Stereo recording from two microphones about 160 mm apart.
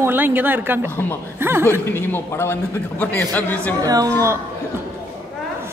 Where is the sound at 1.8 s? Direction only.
15° left (ahead or behind).